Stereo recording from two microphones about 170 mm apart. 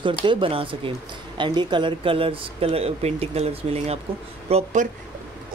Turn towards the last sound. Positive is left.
turn(degrees=-35)  # may be behind; listen again after turning